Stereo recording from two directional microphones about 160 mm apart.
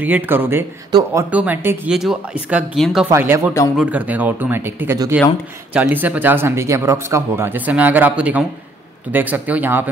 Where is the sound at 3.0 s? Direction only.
15° right (ahead or behind).